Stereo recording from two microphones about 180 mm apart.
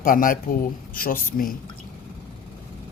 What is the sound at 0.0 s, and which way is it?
Speech, 50° left (ahead or behind).